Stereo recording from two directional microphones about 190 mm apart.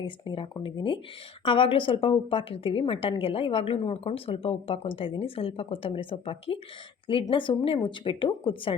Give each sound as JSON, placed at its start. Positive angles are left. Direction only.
{"t": 0.0, "sound": "a woman's voice", "side_deg": 25}